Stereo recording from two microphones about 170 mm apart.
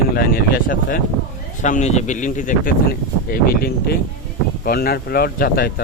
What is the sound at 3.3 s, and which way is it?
A man's voice, 60° left (ahead or behind).